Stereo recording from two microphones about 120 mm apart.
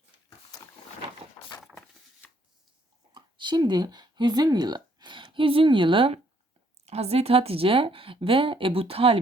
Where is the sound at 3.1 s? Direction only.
40° right (ahead or behind).